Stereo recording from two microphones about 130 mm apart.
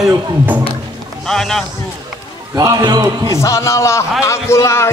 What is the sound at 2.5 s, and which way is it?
Speech, 30° right (ahead or behind).